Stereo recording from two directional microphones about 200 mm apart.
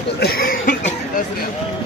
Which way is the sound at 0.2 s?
50° left (ahead or behind).